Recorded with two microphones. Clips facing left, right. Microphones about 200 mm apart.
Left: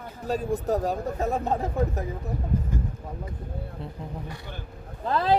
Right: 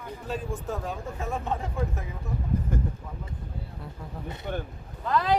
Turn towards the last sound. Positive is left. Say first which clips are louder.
# left 2 dB
turn(degrees=30)  # may be behind; listen again after turning